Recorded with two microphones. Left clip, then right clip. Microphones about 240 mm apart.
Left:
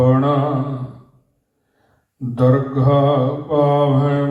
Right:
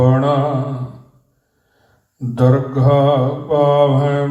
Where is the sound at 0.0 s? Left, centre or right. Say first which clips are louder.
Right 1 dB; right.